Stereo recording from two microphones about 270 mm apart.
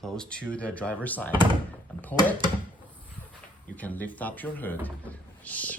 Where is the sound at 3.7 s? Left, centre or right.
Centre.